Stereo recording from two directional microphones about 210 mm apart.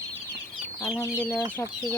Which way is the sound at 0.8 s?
10° left (ahead or behind).